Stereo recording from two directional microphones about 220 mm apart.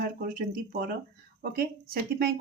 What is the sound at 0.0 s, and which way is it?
Speech, 40° right (ahead or behind).